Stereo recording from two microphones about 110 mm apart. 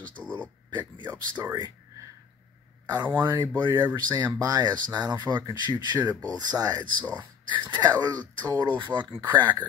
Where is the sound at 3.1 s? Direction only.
20° right (ahead or behind).